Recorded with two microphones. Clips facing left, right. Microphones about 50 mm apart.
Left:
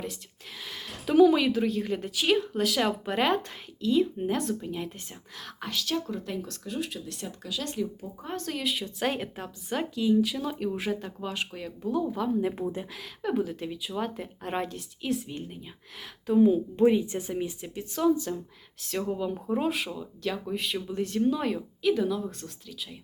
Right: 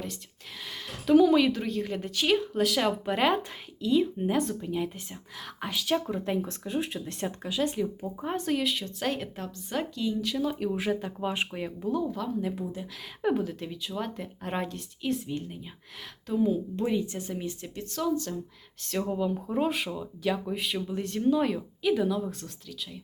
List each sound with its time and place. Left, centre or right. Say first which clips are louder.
0.6 s speech: even; centre
8.5 s speech: right 2 dB; centre
11.2 s speech: right 3 dB; centre
12.0 s a woman's voice: left 3 dB; centre
12.6 s speech: left 4 dB; left
13.3 s speech: left 1 dB; centre
16.2 s a woman's voice: left 5 dB; centre
18.8 s speech: right 1 dB; centre